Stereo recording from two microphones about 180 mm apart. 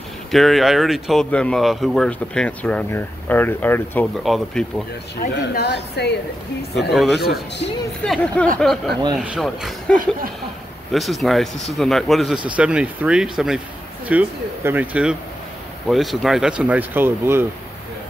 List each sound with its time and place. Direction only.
0.3 s speech: centre (ahead or behind)
5.3 s a woman's voice: 65° left (ahead or behind)
6.8 s speech: centre (ahead or behind)
7.2 s speech: 60° left (ahead or behind)
8.0 s speech: 5° left (ahead or behind); by 17.5 s 10° right (ahead or behind)